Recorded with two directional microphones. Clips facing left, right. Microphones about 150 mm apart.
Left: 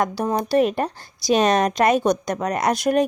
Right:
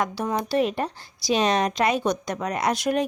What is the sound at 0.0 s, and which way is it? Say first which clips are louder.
Speech: left 4 dB; 40° left (ahead or behind).